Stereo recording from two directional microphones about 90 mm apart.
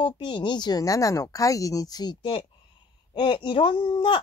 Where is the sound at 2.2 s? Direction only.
70° left (ahead or behind).